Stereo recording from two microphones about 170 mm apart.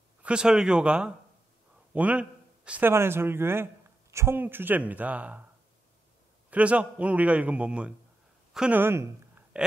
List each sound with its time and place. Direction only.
0.2 s speech: 5° right (ahead or behind)
6.5 s a man's voice: 10° right (ahead or behind)
9.5 s burping: 5° right (ahead or behind)